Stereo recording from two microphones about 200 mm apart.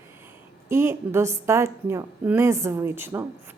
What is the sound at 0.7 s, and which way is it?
A woman's voice, 10° right (ahead or behind).